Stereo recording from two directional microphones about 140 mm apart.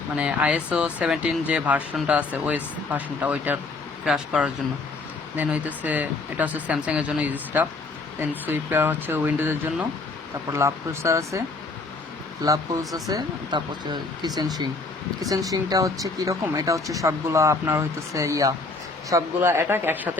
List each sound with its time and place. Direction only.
0.2 s speech: 10° right (ahead or behind)